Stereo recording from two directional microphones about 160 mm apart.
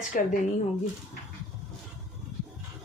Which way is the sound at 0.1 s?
55° left (ahead or behind).